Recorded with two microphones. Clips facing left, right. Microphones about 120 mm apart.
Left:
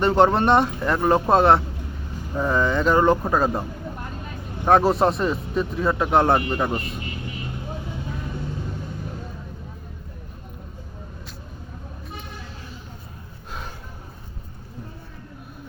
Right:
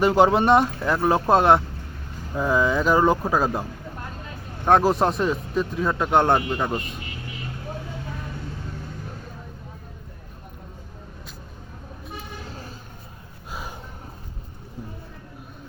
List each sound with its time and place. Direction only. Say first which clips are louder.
0.0 s speech: even; 5° right (ahead or behind)